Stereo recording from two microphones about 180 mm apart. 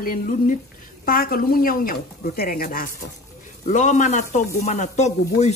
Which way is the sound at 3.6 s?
40° left (ahead or behind).